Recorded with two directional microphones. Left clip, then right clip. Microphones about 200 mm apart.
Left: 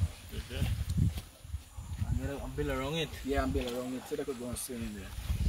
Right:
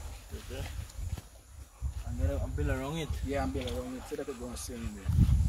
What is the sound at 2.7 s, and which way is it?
Speech, 50° right (ahead or behind).